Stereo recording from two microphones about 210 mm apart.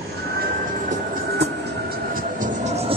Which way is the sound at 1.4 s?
45° right (ahead or behind).